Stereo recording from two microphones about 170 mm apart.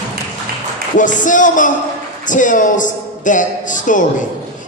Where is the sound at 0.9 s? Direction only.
50° left (ahead or behind).